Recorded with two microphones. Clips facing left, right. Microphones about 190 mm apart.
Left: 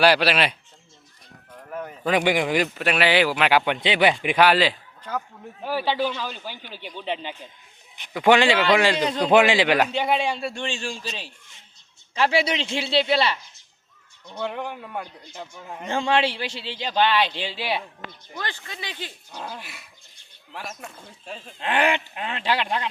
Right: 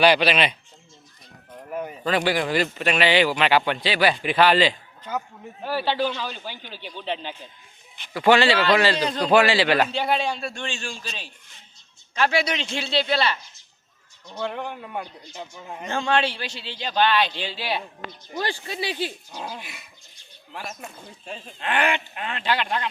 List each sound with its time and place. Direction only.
0.0 s a man's voice: 5° left (ahead or behind)
1.5 s a sound: 15° right (ahead or behind)
2.0 s a man's voice: 15° left (ahead or behind)
3.8 s a man's voice: 20° left (ahead or behind)
10.0 s a man's voice: centre (ahead or behind)
10.8 s speech: 20° left (ahead or behind)
14.4 s a man's voice: 5° left (ahead or behind)
16.0 s speech: 25° left (ahead or behind)
19.0 s a man's voice: 10° right (ahead or behind)
21.6 s a man's voice: 25° left (ahead or behind)